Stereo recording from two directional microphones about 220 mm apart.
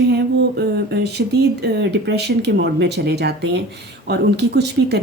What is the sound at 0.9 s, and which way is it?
Speech, 50° right (ahead or behind).